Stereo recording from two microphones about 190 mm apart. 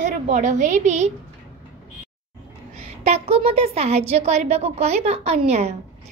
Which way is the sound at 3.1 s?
30° right (ahead or behind).